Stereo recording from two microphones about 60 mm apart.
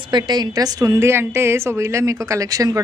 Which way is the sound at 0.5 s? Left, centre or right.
Right.